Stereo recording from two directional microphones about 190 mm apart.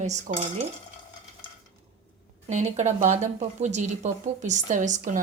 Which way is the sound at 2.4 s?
35° right (ahead or behind).